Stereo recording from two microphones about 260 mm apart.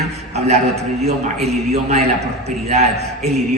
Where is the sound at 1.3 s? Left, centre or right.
Centre.